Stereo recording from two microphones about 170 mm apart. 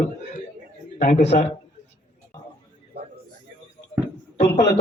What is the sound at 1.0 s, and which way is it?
Speech, 45° left (ahead or behind).